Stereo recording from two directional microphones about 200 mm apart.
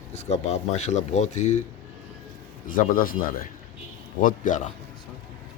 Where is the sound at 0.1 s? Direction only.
35° left (ahead or behind).